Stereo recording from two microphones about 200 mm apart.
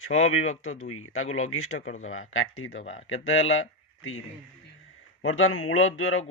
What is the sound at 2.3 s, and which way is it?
Speech, 80° left.